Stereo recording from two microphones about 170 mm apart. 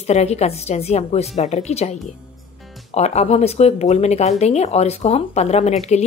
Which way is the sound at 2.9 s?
40° left (ahead or behind).